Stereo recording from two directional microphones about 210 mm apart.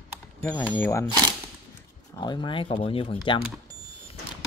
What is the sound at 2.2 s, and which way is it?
Speech, 20° left (ahead or behind).